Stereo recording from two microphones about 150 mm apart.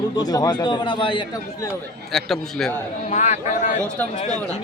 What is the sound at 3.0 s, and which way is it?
Speech, 50° left (ahead or behind).